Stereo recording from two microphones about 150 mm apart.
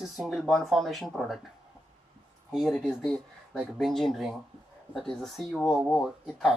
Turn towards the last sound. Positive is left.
turn(degrees=0)  # may be behind; listen again after turning